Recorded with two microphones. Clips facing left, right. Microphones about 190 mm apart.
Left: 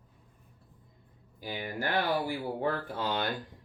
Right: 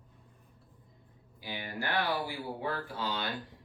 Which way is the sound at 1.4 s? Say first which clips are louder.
Left 3 dB; 45° left (ahead or behind).